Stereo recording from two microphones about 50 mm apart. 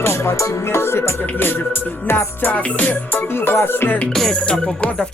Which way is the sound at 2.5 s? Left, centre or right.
Left.